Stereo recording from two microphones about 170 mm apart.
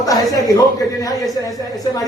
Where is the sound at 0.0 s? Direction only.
20° left (ahead or behind).